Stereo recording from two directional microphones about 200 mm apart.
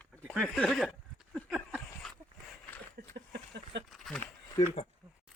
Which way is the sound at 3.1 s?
55° right (ahead or behind).